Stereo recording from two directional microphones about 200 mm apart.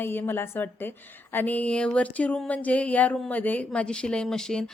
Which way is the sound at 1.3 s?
10° left (ahead or behind).